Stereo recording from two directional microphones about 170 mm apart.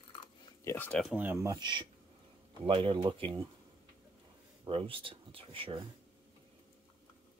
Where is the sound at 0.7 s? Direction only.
10° left (ahead or behind).